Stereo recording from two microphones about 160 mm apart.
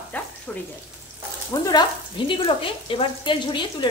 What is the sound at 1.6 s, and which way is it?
Speech, 25° left (ahead or behind).